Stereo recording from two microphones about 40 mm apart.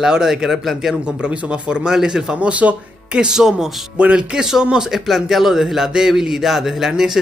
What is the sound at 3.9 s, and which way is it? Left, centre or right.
Speech, right.